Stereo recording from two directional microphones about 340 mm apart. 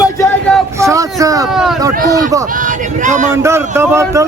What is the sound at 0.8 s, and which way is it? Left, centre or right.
Speech, centre.